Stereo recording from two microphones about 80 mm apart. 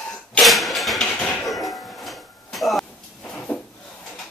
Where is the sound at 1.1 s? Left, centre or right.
Centre.